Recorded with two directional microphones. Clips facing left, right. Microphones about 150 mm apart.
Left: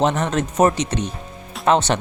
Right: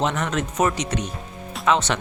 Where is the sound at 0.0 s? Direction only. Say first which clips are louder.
Left 4 dB; 35° left (ahead or behind).